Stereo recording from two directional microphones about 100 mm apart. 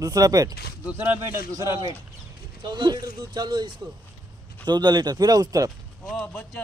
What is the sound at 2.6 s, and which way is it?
Speech, 45° right (ahead or behind).